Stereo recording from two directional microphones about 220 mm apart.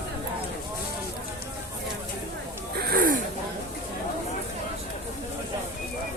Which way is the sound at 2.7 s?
40° right (ahead or behind).